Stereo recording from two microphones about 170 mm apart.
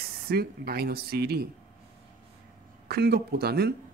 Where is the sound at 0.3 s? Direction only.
65° right (ahead or behind).